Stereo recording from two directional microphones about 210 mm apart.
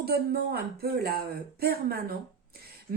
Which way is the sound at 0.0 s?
50° right (ahead or behind).